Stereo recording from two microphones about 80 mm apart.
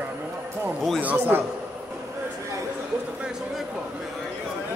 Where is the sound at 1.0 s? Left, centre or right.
Right.